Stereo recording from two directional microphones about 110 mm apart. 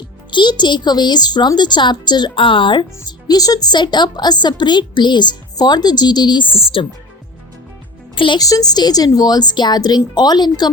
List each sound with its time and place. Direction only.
0.3 s a woman's voice: 45° left (ahead or behind)
8.1 s speech: 50° left (ahead or behind)
8.4 s a woman's voice: 35° left (ahead or behind)